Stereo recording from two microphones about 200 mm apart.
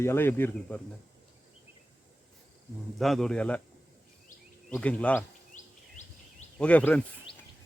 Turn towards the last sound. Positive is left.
turn(degrees=5)  # may be behind; listen again after turning